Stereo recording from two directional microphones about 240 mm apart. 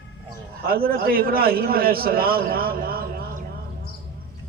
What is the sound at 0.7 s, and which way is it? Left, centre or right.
A man's voice, right.